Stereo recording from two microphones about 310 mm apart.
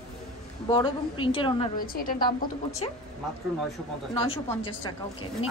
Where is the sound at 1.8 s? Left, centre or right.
Left.